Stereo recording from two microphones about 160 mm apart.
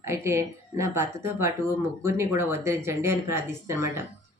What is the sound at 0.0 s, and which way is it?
Speech, 15° right (ahead or behind).